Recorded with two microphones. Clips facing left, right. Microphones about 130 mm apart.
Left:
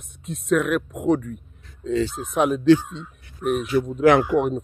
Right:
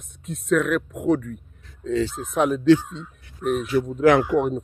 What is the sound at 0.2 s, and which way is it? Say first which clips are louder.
A man's voice: even; 20° left (ahead or behind).